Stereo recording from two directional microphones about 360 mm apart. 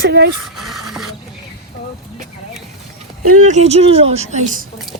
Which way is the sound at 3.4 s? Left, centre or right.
Centre.